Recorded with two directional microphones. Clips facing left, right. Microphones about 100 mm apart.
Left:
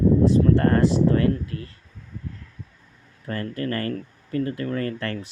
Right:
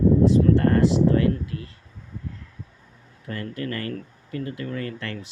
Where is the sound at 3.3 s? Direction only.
40° left (ahead or behind).